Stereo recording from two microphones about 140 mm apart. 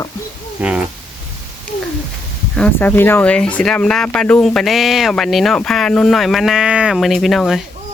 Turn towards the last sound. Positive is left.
turn(degrees=0)  # may be behind; listen again after turning